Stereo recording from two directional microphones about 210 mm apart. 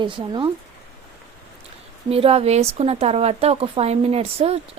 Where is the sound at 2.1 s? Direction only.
25° right (ahead or behind).